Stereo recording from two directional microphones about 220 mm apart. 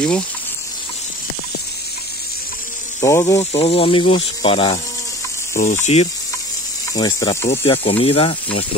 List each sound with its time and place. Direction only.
3.0 s speech: 15° left (ahead or behind)
3.5 s speech: 25° left (ahead or behind)
5.5 s mechanisms: 35° left (ahead or behind)
6.9 s speech: 15° left (ahead or behind)